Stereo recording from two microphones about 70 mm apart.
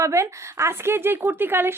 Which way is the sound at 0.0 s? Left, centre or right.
Right.